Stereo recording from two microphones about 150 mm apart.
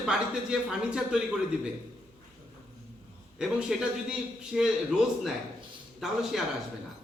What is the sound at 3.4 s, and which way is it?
A man's voice, 5° right (ahead or behind).